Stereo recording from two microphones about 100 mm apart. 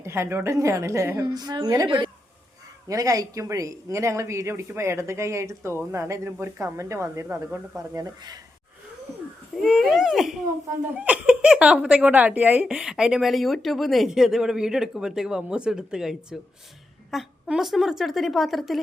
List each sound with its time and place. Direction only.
0.0 s speech: 25° right (ahead or behind)
1.2 s a woman's voice: 40° right (ahead or behind)
7.3 s speech: 20° right (ahead or behind)
7.9 s a woman's voice: 40° right (ahead or behind)
9.6 s a woman's voice: centre (ahead or behind)
10.9 s a woman's voice: 15° right (ahead or behind)